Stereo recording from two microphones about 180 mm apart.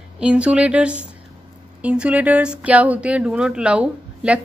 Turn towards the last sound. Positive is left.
turn(degrees=-5)  # may be behind; listen again after turning